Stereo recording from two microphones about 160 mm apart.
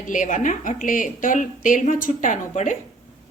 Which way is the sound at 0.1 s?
55° left (ahead or behind).